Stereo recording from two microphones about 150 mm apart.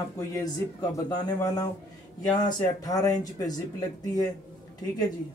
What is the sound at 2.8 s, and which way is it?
Speech, 25° left (ahead or behind).